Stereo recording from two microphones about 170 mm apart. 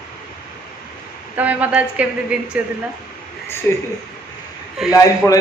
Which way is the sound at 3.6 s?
15° left (ahead or behind).